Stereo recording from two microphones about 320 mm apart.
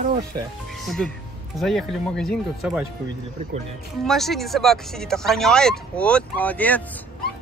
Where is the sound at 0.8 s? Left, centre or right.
Centre.